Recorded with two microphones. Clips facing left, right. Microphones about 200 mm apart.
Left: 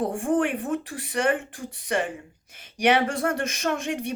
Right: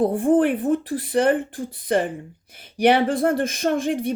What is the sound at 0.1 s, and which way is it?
A woman's voice, 35° right (ahead or behind).